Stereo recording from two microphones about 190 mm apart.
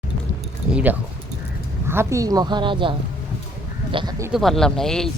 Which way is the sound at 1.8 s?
15° right (ahead or behind).